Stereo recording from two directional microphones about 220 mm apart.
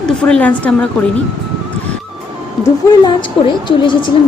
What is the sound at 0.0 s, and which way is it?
Speech, 5° left (ahead or behind).